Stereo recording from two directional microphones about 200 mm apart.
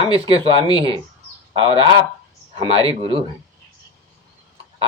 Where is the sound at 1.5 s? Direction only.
25° right (ahead or behind).